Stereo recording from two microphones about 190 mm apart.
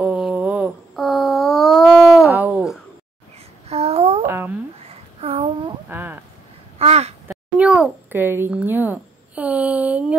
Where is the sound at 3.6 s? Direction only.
30° right (ahead or behind).